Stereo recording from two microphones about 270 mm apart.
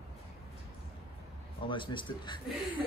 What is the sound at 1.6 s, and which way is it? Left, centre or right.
Speech, centre.